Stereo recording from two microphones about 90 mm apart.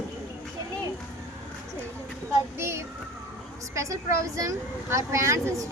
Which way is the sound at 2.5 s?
30° right (ahead or behind).